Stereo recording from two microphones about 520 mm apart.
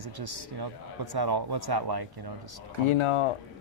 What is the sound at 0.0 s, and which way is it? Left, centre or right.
Speech, right.